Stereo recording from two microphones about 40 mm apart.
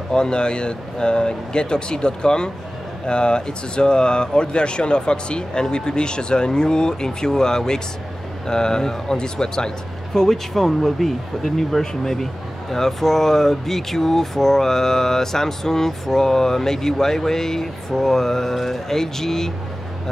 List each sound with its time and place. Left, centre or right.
0.1 s speech: left